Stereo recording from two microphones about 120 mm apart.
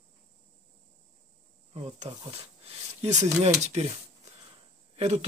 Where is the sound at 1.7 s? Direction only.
60° right (ahead or behind).